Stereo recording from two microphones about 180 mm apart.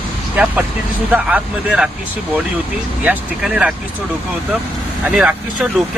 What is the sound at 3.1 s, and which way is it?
Speech, 5° right (ahead or behind).